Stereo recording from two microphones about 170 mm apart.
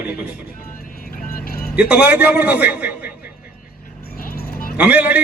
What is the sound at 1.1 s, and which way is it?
Vehicle, 55° left (ahead or behind).